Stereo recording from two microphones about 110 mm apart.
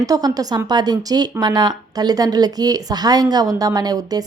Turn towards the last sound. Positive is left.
turn(degrees=-35)  # may be behind; listen again after turning